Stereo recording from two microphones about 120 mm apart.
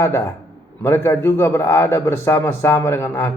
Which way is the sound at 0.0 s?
20° left (ahead or behind).